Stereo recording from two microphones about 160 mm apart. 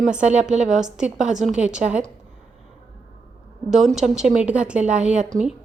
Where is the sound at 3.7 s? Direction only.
Centre (ahead or behind).